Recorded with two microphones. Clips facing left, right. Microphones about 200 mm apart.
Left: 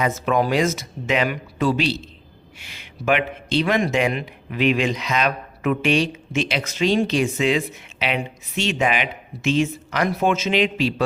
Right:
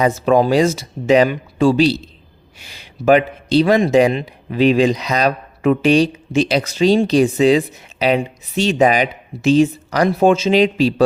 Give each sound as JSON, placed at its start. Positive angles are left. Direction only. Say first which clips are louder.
{"t": 0.0, "sound": "speech", "louder": "right 6 dB", "side_deg": -30}